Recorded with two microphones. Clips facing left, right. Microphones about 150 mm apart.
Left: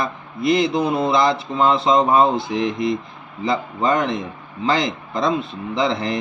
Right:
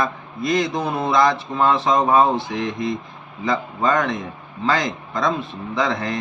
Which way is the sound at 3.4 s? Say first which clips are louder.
Left 1 dB; 25° left (ahead or behind).